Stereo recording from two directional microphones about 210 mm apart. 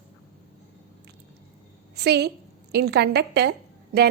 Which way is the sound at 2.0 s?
50° right (ahead or behind).